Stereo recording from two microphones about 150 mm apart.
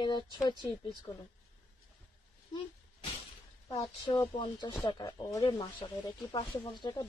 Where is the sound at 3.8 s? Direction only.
20° left (ahead or behind).